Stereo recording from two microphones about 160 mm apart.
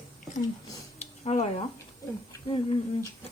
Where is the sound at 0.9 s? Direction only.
40° left (ahead or behind).